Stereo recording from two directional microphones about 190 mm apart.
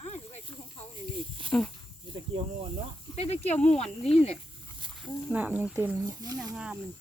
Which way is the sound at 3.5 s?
5° left (ahead or behind).